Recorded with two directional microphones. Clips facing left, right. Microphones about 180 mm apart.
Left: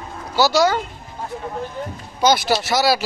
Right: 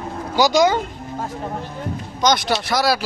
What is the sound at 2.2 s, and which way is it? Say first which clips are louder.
Speech: left 2 dB; 5° left (ahead or behind).